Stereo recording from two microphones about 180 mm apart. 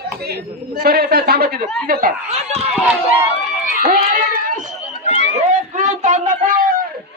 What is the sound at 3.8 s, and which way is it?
Speech, 50° right (ahead or behind).